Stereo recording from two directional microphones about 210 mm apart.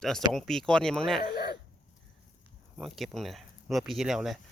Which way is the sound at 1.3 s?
50° left (ahead or behind).